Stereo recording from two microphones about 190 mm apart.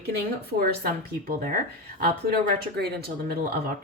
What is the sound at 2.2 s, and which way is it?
Speech, 55° right (ahead or behind).